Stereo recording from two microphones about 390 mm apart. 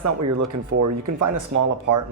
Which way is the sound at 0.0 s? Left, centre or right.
Right.